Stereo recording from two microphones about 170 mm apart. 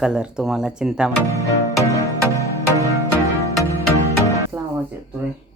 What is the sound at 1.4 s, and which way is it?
Music, 20° left (ahead or behind).